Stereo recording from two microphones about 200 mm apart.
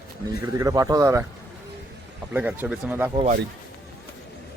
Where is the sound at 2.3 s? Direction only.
10° right (ahead or behind).